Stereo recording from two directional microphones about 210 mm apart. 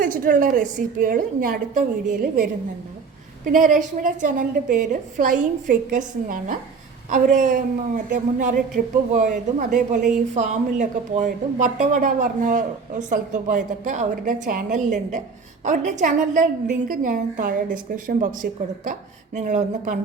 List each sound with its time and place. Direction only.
0.0 s speech: 40° right (ahead or behind)